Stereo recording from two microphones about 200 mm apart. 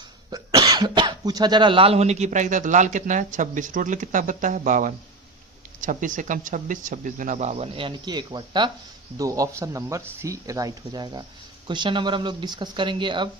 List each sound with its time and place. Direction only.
0.3 s speech: 20° right (ahead or behind)